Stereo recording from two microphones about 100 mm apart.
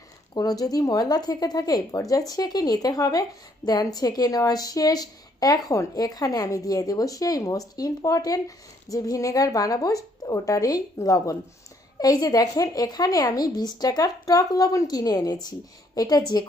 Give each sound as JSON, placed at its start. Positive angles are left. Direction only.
{"t": 0.3, "sound": "a woman's voice", "side_deg": 40}